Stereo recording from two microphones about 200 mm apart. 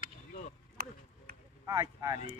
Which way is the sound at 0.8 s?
45° right (ahead or behind).